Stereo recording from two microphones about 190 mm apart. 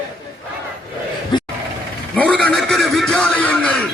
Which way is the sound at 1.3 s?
25° left (ahead or behind).